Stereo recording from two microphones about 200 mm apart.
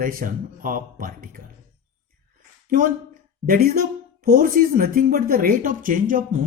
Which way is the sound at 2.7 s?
45° right (ahead or behind).